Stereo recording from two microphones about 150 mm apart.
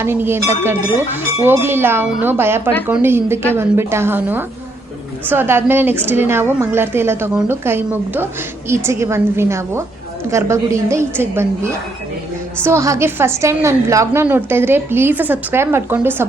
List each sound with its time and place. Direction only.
0.0 s a woman's voice: 15° right (ahead or behind)